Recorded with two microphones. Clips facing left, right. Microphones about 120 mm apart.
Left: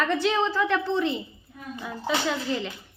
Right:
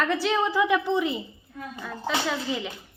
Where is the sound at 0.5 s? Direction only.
15° right (ahead or behind).